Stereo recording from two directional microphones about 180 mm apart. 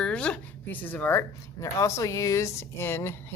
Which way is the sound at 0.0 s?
5° left (ahead or behind).